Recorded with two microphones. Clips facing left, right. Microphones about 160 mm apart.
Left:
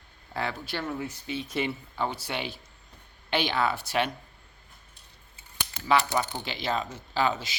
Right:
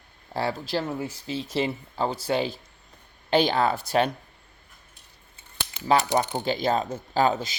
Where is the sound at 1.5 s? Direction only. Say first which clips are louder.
Right 4 dB; 35° right (ahead or behind).